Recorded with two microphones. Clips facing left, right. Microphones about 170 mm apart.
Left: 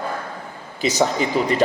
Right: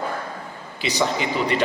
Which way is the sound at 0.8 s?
45° left (ahead or behind).